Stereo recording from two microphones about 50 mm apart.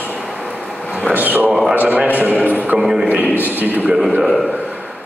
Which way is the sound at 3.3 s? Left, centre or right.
Right.